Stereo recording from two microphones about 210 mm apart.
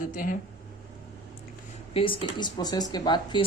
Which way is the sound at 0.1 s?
40° left (ahead or behind).